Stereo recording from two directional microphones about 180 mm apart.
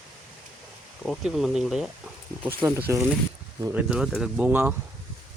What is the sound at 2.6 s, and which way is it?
Speech, 15° right (ahead or behind).